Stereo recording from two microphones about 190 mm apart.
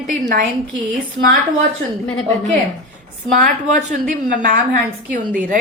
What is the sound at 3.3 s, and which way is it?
A woman's voice, 45° right (ahead or behind).